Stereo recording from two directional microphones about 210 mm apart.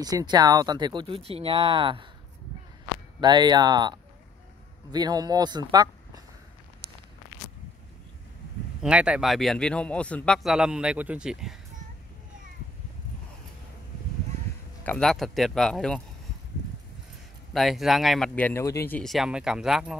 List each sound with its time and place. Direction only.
0.0 s speech: 20° right (ahead or behind)
3.2 s speech: 20° right (ahead or behind)
8.8 s speech: 5° right (ahead or behind)
14.9 s speech: centre (ahead or behind)
17.5 s speech: centre (ahead or behind)